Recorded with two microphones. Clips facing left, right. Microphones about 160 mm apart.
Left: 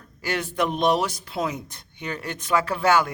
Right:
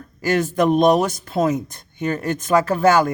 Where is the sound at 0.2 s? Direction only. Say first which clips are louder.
Right 7 dB; 45° right (ahead or behind).